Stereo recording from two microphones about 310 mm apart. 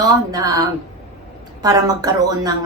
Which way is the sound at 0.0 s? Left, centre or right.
Centre.